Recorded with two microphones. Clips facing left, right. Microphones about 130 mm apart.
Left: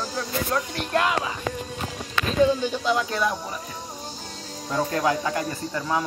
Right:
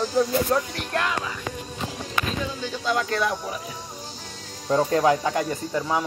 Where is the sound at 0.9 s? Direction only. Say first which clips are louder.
Left 3 dB; 10° left (ahead or behind).